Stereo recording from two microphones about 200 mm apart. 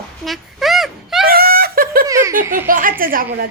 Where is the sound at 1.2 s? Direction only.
50° right (ahead or behind).